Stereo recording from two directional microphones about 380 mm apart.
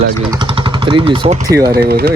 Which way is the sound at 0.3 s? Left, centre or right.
Centre.